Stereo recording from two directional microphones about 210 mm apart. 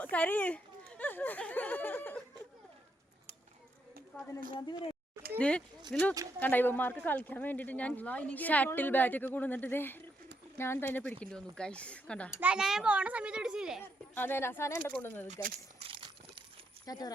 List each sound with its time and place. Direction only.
0.0 s speech: 5° left (ahead or behind)
4.6 s speech: 20° left (ahead or behind)
5.4 s a child's voice: 5° left (ahead or behind)
14.2 s speech: 10° left (ahead or behind)
15.3 s a sound: 30° right (ahead or behind)
16.8 s speech: 20° left (ahead or behind)